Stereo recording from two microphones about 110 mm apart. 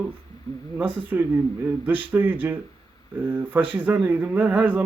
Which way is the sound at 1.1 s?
15° right (ahead or behind).